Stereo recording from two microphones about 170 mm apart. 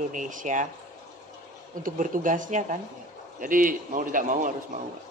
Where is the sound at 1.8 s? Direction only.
50° right (ahead or behind).